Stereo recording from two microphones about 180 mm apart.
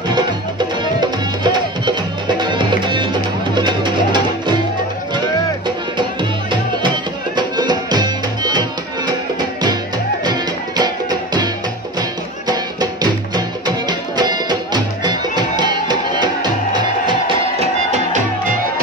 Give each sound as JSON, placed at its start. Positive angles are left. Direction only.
{"t": 0.1, "sound": "music", "side_deg": -25}
{"t": 7.3, "sound": "music", "side_deg": -25}
{"t": 10.2, "sound": "music", "side_deg": -25}
{"t": 13.0, "sound": "music", "side_deg": -25}
{"t": 17.9, "sound": "music", "side_deg": -45}